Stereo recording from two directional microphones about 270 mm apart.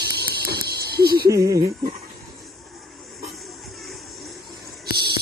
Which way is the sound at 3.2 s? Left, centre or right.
Centre.